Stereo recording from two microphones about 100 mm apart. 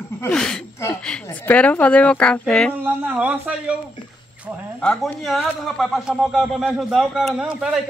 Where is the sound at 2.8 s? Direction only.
15° right (ahead or behind).